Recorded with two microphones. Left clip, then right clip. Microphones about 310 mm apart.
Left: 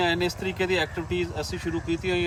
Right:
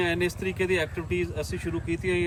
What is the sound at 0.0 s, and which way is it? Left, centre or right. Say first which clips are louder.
Speech: left 2 dB; centre.